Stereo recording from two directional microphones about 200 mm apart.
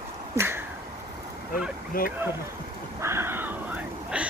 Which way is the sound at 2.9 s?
15° right (ahead or behind).